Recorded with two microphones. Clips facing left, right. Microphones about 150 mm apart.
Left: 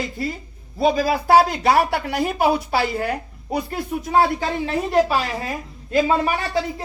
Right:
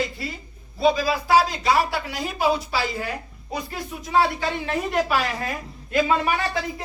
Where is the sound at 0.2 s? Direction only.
45° left (ahead or behind).